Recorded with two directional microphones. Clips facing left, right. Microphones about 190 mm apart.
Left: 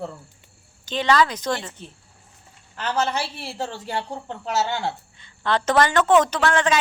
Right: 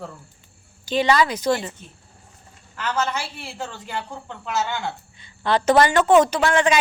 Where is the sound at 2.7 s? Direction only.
30° left (ahead or behind).